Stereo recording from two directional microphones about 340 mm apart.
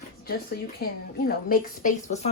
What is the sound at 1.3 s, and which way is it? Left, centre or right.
A woman's voice, left.